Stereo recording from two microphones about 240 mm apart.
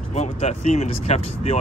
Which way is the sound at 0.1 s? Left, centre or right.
Left.